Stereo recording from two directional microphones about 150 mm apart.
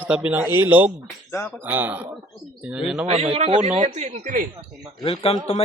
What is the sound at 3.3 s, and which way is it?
Speech, 50° right (ahead or behind).